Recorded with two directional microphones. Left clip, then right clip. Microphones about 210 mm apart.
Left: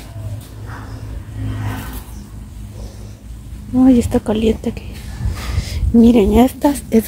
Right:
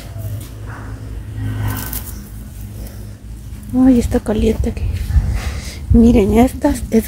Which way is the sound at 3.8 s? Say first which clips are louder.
Even; 5° left (ahead or behind).